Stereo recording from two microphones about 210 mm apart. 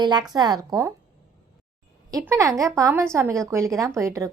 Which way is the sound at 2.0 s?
15° right (ahead or behind).